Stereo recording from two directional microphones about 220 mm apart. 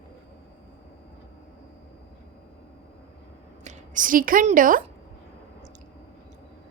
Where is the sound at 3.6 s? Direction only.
35° right (ahead or behind).